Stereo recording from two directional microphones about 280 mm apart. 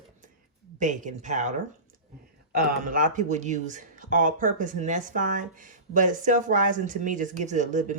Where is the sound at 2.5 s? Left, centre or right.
Right.